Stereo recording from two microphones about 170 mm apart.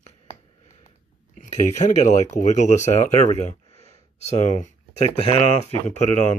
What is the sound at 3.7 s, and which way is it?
Gasp, 40° left (ahead or behind).